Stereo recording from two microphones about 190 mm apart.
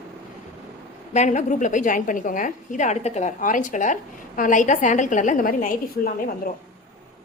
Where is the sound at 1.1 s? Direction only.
40° left (ahead or behind).